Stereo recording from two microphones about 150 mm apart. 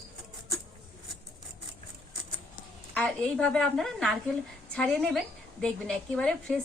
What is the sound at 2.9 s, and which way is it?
A woman's voice, 5° left (ahead or behind).